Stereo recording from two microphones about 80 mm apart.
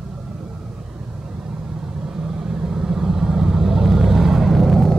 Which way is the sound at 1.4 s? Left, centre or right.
Centre.